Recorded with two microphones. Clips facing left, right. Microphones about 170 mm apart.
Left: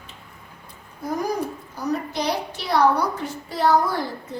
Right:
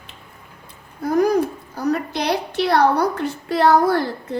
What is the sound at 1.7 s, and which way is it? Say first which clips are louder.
A woman's voice: right 4 dB; 70° right (ahead or behind).